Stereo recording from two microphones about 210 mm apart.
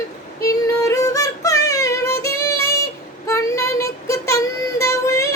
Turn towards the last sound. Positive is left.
turn(degrees=15)  # may be behind; listen again after turning